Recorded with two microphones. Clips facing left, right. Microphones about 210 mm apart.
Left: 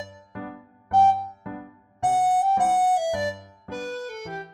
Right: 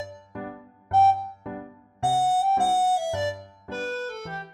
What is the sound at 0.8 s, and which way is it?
Music, 15° left (ahead or behind).